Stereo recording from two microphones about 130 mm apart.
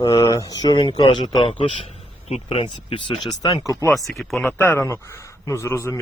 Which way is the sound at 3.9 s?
Centre (ahead or behind).